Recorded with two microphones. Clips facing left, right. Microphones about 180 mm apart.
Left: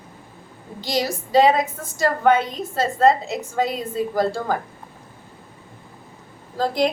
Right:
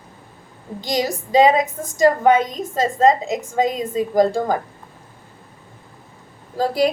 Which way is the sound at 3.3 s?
45° right (ahead or behind).